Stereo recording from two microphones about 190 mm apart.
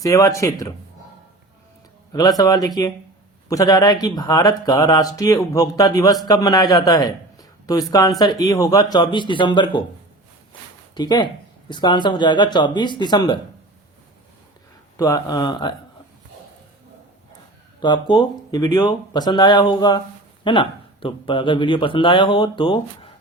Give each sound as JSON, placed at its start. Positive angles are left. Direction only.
{"t": 0.0, "sound": "speech", "side_deg": 15}
{"t": 2.4, "sound": "a man's voice", "side_deg": 20}
{"t": 10.9, "sound": "speech", "side_deg": 20}
{"t": 14.9, "sound": "speech", "side_deg": 20}
{"t": 17.7, "sound": "speech", "side_deg": 25}